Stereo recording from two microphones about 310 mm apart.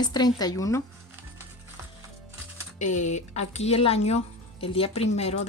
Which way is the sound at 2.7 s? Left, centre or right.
Left.